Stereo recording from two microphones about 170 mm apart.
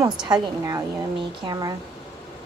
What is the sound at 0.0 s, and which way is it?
A woman's voice, 20° right (ahead or behind).